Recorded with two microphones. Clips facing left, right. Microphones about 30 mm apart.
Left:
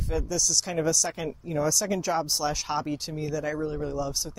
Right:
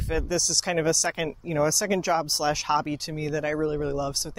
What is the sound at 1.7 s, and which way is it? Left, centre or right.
Speech, centre.